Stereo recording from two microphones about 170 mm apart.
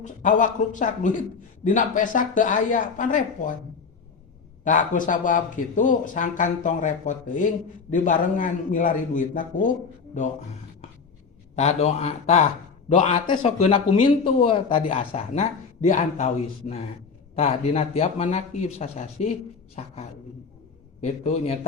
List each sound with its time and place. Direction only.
0.0 s speech: 45° left (ahead or behind)
4.6 s speech: 50° left (ahead or behind)
11.5 s speech: 40° left (ahead or behind)
13.2 s speech: 25° left (ahead or behind)
13.6 s speech: 35° left (ahead or behind)